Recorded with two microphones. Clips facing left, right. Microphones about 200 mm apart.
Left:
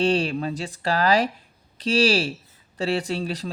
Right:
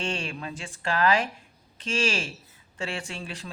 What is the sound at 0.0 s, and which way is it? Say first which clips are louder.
Speech: left 10 dB; 35° left (ahead or behind).